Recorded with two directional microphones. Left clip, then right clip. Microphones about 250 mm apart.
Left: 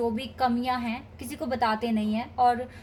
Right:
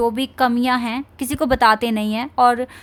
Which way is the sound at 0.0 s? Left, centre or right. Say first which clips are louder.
Right 9 dB; right.